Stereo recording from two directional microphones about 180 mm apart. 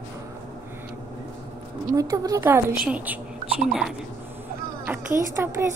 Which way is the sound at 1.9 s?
20° right (ahead or behind).